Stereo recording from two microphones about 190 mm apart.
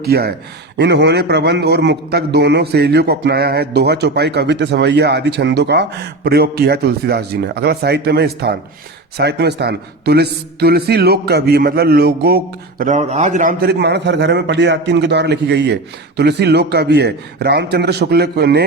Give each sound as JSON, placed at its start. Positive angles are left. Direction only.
{"t": 0.0, "sound": "a man's voice", "side_deg": -55}
{"t": 12.8, "sound": "a man's voice", "side_deg": -40}